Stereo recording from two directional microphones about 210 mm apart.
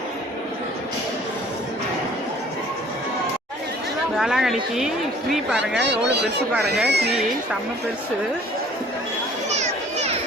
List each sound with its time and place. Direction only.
4.2 s speech: centre (ahead or behind)
5.7 s speech: 55° right (ahead or behind)
9.5 s a sound: 35° right (ahead or behind)